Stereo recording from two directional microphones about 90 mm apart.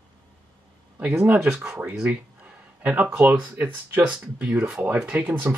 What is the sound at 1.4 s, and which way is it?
Speech, 5° right (ahead or behind).